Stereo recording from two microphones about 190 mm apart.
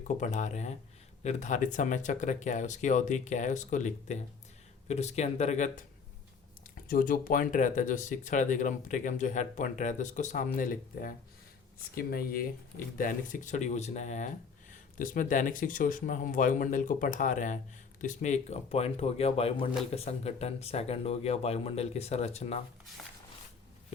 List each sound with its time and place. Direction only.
0.2 s speech: 40° left (ahead or behind)
6.8 s speech: 50° left (ahead or behind)